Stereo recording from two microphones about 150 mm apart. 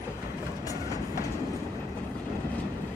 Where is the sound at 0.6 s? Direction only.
20° left (ahead or behind).